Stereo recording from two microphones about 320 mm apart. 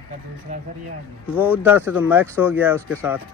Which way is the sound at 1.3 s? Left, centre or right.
Centre.